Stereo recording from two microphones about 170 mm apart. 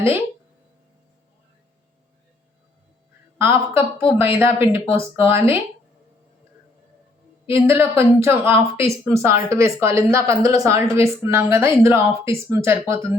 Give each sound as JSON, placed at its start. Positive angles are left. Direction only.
{"t": 3.3, "sound": "a woman's voice", "side_deg": -15}
{"t": 7.5, "sound": "a woman's voice", "side_deg": -15}